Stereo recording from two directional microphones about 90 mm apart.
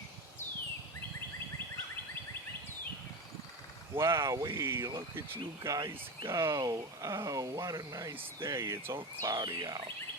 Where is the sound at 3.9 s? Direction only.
35° right (ahead or behind).